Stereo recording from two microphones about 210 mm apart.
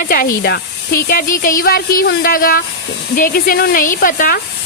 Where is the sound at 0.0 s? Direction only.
45° left (ahead or behind).